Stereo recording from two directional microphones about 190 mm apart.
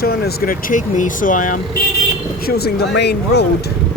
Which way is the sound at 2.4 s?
55° left (ahead or behind).